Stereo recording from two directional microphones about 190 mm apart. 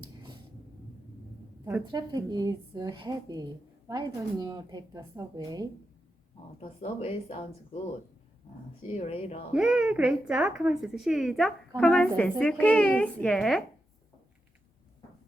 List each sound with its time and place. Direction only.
1.9 s speech: 20° right (ahead or behind)
6.6 s a woman's voice: 30° left (ahead or behind)
8.9 s a woman's voice: 30° left (ahead or behind)
9.5 s speech: 5° right (ahead or behind)